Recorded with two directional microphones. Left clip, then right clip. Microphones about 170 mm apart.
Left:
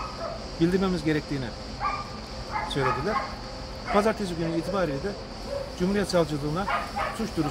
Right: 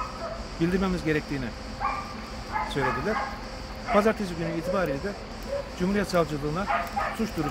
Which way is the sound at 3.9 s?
10° right (ahead or behind).